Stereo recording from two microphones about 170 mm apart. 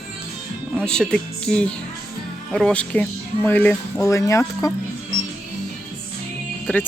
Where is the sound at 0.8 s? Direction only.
5° left (ahead or behind).